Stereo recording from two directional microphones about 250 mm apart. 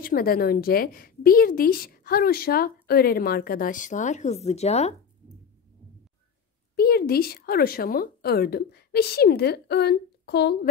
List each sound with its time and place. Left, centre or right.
0.0 s a woman's voice: left
6.7 s a woman's voice: left